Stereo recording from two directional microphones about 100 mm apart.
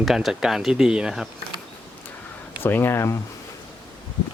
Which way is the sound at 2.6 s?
20° left (ahead or behind).